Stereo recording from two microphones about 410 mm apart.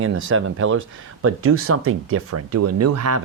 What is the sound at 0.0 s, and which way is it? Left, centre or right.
Speech, right.